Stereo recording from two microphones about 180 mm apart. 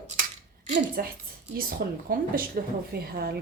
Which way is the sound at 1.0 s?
55° right (ahead or behind).